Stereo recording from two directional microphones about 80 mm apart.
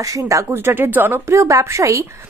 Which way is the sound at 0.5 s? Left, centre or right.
Right.